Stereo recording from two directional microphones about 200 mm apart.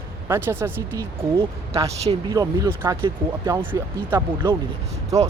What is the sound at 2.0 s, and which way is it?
Speech, 30° right (ahead or behind).